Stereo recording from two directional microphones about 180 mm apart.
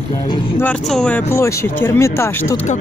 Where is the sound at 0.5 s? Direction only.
5° left (ahead or behind).